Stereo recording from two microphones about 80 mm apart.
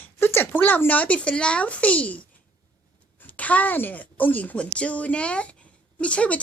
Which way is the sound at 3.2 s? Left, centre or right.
Centre.